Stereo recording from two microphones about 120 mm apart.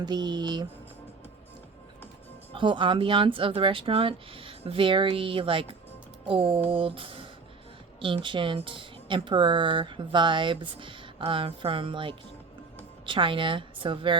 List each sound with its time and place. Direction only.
0.0 s mantra: 35° right (ahead or behind)
2.5 s speech: 45° right (ahead or behind)